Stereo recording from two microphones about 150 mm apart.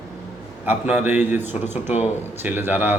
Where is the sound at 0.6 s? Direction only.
10° right (ahead or behind).